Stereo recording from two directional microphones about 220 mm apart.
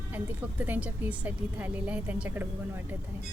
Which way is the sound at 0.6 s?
5° right (ahead or behind).